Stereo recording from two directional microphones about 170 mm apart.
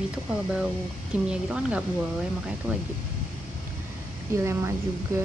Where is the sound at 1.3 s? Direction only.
5° right (ahead or behind).